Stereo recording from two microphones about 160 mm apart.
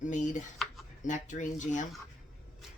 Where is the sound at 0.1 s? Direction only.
50° left (ahead or behind).